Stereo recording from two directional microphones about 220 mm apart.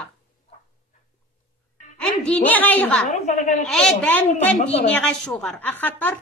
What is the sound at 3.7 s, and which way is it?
A woman's voice, 5° left (ahead or behind).